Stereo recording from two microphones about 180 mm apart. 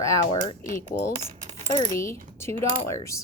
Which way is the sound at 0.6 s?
45° left (ahead or behind).